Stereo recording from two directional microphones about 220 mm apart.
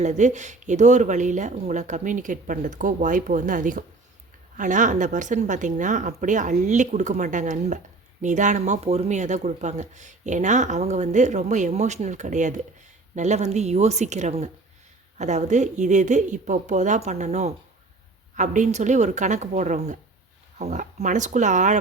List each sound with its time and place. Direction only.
0.0 s speech: 35° right (ahead or behind)